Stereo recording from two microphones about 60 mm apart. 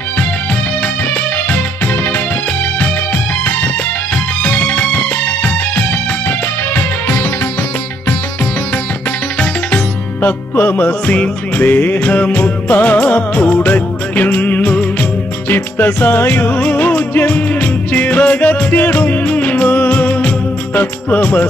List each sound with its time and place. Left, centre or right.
4.4 s music: left
10.2 s music: left
15.5 s music: left